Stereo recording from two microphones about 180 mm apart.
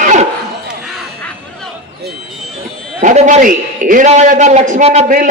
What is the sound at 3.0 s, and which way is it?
A man's voice, 40° right (ahead or behind).